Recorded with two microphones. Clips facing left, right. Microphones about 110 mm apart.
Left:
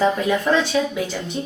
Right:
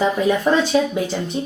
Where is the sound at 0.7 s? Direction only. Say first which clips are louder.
Right 3 dB; 30° right (ahead or behind).